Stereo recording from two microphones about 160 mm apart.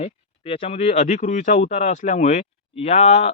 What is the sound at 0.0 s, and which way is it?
Speech, 35° left (ahead or behind).